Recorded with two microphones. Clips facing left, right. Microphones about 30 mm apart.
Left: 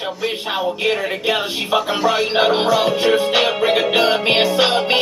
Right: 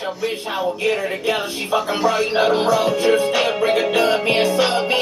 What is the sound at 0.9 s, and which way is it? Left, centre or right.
Music, left.